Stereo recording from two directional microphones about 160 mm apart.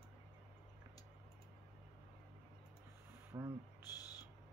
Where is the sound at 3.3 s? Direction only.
20° right (ahead or behind).